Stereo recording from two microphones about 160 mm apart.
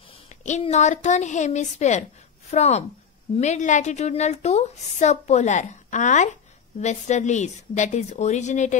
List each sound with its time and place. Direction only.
0.5 s a woman's voice: 45° left (ahead or behind)